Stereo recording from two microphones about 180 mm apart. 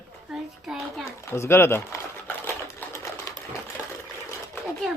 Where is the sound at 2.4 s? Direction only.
15° left (ahead or behind).